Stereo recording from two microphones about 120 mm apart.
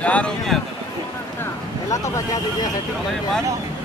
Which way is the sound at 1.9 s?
25° left (ahead or behind).